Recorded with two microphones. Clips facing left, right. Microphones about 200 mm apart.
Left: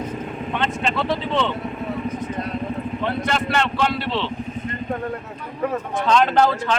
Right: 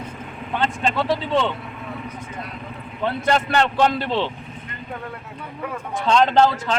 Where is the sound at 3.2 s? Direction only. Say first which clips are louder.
Right 5 dB; 35° right (ahead or behind).